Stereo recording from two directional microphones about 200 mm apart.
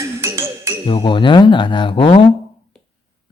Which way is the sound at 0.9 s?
25° left (ahead or behind).